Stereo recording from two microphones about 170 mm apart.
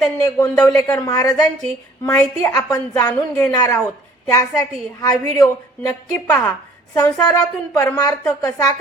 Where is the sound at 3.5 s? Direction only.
20° left (ahead or behind).